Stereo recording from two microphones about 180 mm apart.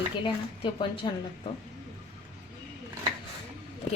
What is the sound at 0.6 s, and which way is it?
Speech, 25° left (ahead or behind).